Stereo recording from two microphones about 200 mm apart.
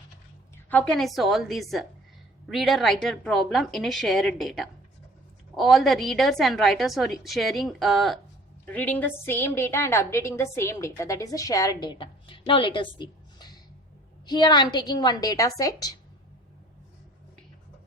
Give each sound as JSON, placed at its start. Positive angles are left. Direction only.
{"t": 0.5, "sound": "a woman's voice", "side_deg": 10}